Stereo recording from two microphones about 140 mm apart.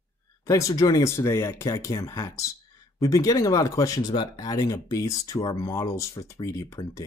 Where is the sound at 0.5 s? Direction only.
25° left (ahead or behind).